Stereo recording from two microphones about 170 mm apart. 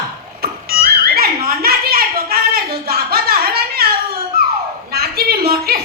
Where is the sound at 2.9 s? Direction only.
65° right (ahead or behind).